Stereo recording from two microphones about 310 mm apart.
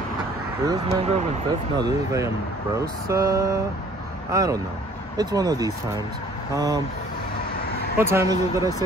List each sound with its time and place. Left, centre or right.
0.7 s speech: centre
8.0 s speech: centre